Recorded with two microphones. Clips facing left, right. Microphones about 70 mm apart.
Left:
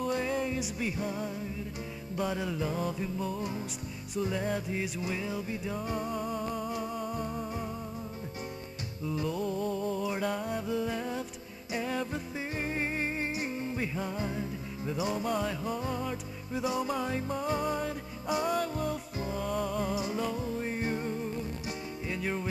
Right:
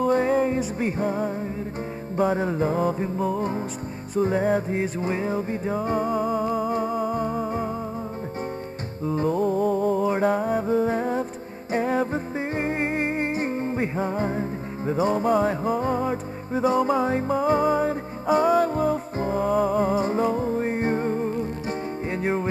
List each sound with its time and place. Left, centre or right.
0.1 s music: right
9.0 s music: right